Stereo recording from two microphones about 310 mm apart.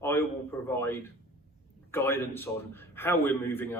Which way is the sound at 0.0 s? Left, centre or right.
Centre.